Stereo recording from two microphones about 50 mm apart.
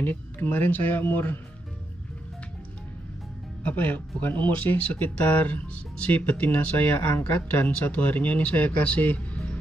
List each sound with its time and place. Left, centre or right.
0.0 s speech: left
3.6 s speech: left
9.3 s music: left